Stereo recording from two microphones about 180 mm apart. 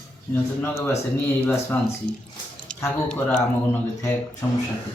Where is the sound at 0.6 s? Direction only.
15° left (ahead or behind).